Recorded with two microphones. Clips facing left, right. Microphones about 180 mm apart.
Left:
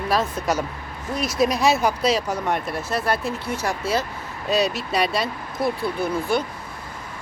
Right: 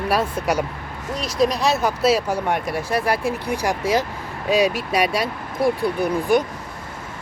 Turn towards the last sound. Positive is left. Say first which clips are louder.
# right 4 dB
turn(degrees=-15)  # may be behind; listen again after turning